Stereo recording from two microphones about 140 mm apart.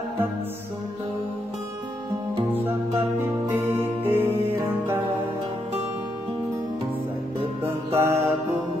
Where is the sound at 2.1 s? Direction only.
20° right (ahead or behind).